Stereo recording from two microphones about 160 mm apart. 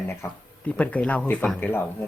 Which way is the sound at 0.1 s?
10° left (ahead or behind).